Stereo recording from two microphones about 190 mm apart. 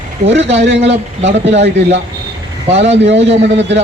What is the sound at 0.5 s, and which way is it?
A man's voice, 65° right (ahead or behind).